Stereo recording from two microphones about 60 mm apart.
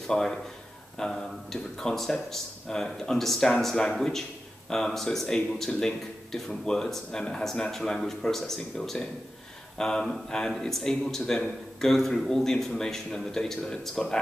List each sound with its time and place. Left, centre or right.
0.0 s a man's voice: centre